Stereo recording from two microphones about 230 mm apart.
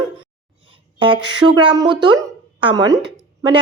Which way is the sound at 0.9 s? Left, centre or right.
Right.